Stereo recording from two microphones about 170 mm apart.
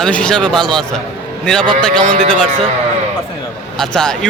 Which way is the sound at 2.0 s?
35° right (ahead or behind).